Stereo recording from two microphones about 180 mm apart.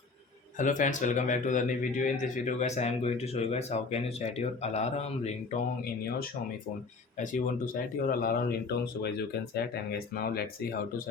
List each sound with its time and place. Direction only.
0.6 s speech: 45° left (ahead or behind)
7.2 s speech: 50° left (ahead or behind)